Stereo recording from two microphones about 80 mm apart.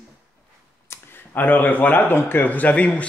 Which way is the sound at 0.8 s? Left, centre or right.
Left.